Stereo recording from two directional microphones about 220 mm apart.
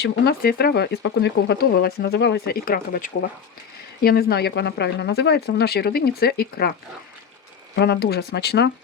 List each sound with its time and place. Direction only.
0.0 s speech: 45° left (ahead or behind)
7.8 s speech: 45° left (ahead or behind)